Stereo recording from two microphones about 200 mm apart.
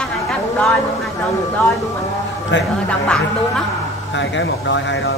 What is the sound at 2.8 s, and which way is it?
Speech, 5° left (ahead or behind).